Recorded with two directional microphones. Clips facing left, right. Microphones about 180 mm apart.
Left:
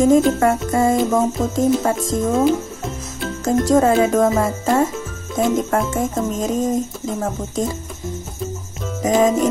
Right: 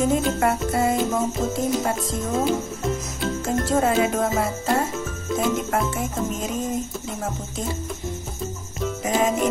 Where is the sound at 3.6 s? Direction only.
40° left (ahead or behind).